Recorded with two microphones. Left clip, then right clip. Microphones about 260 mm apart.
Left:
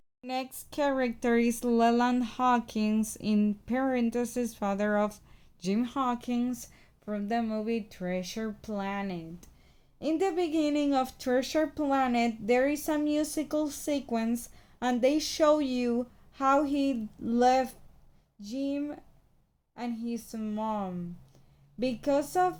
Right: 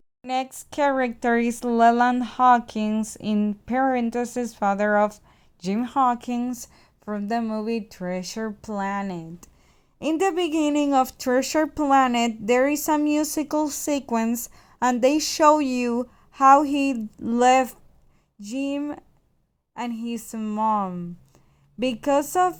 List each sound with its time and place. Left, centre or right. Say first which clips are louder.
0.3 s speech: right 8 dB; centre